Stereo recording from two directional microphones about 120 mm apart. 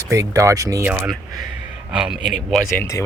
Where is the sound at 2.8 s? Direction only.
25° left (ahead or behind).